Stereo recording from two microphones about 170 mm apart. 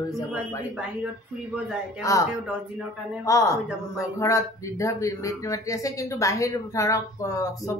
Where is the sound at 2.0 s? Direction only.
20° left (ahead or behind).